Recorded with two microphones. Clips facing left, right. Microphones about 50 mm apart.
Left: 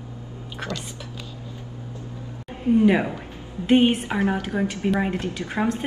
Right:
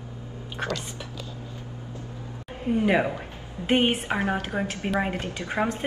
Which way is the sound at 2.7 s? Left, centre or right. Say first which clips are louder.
Left 4 dB; right.